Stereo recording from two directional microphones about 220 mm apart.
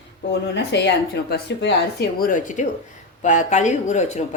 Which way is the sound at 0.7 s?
50° left (ahead or behind).